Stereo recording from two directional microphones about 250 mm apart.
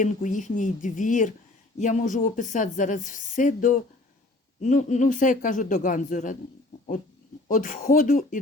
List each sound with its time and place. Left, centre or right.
0.0 s speech: left
7.4 s speech: left